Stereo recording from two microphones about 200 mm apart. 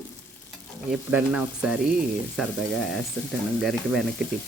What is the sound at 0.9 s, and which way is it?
Stir, 5° right (ahead or behind).